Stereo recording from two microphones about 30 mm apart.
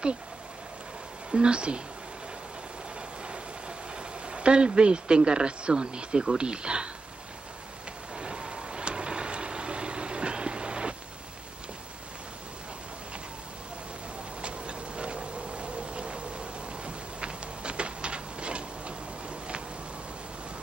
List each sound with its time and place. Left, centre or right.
1.3 s speech: right
3.9 s speech: right
8.2 s vehicle: right
14.4 s a sound: right